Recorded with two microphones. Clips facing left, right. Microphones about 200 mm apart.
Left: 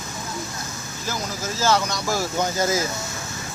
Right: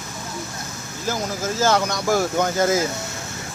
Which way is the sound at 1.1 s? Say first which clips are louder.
Right 4 dB; 50° right (ahead or behind).